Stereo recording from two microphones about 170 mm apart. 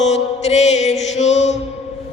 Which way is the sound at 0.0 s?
40° left (ahead or behind).